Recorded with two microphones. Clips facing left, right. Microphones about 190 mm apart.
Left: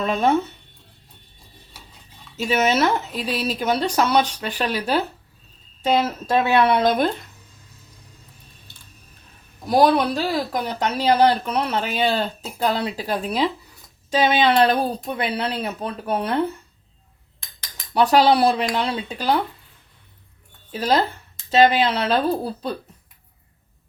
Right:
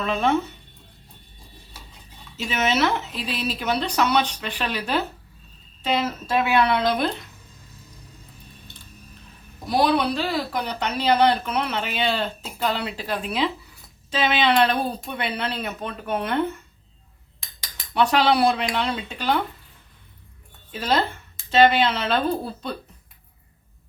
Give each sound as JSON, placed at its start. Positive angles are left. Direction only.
{"t": 0.0, "sound": "speech", "side_deg": 40}
{"t": 2.5, "sound": "speech", "side_deg": 40}
{"t": 9.6, "sound": "speech", "side_deg": 45}
{"t": 17.9, "sound": "speech", "side_deg": 40}
{"t": 20.7, "sound": "speech", "side_deg": 40}